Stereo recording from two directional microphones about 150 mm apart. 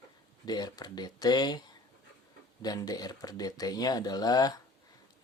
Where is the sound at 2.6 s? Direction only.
25° left (ahead or behind).